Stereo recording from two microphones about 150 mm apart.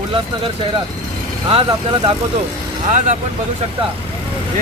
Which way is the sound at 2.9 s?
55° right (ahead or behind).